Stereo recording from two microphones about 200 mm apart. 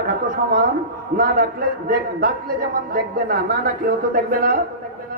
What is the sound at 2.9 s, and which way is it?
A woman's voice, 45° right (ahead or behind).